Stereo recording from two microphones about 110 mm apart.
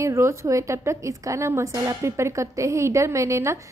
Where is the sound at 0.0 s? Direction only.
25° right (ahead or behind).